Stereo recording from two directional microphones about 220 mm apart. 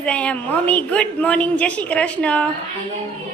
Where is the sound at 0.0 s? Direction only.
5° left (ahead or behind).